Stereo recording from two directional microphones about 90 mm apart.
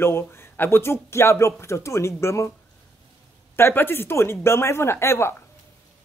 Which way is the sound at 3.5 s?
25° left (ahead or behind).